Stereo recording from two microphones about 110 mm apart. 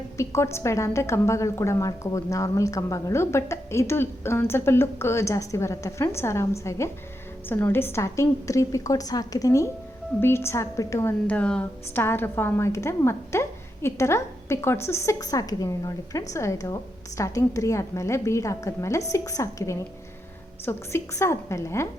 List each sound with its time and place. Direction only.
0.2 s a woman's voice: 25° left (ahead or behind)
11.3 s a woman's voice: 10° left (ahead or behind); by 21.8 s 25° left (ahead or behind)